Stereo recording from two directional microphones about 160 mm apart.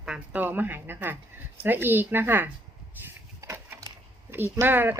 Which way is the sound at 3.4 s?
15° right (ahead or behind).